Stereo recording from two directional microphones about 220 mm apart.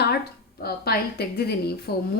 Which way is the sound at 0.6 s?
45° left (ahead or behind).